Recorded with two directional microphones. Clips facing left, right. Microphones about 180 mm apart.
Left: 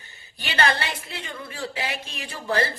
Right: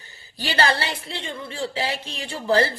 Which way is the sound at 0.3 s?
30° right (ahead or behind).